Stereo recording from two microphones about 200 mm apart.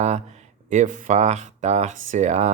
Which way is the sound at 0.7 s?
40° right (ahead or behind).